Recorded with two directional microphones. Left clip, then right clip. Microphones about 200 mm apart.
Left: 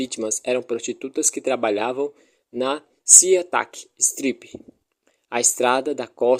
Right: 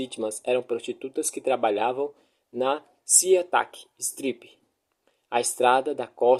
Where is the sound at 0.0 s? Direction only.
45° left (ahead or behind).